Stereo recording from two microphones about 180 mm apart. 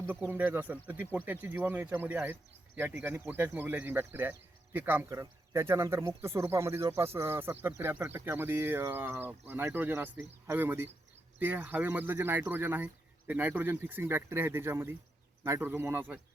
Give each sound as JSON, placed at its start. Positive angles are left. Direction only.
{"t": 0.3, "sound": "speech", "side_deg": -10}